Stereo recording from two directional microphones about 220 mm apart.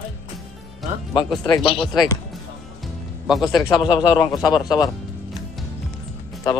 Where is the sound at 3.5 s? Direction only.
15° left (ahead or behind).